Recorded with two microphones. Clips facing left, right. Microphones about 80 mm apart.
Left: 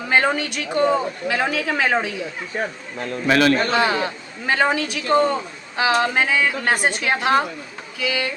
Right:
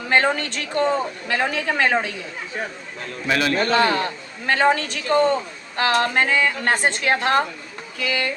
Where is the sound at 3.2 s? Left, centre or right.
Left.